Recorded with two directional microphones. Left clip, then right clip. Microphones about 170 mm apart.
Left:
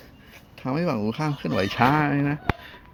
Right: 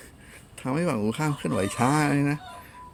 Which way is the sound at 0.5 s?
5° right (ahead or behind).